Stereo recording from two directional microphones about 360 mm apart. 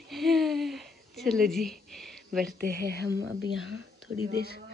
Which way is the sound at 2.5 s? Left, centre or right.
Right.